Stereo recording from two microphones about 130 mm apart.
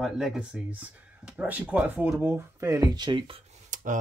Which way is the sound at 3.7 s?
85° right.